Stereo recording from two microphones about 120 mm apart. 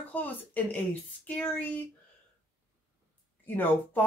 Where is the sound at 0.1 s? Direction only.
15° left (ahead or behind).